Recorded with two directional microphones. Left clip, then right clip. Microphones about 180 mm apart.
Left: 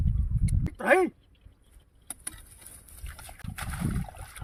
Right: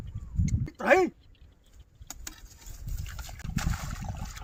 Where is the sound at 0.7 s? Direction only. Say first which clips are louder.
Even; 5° left (ahead or behind).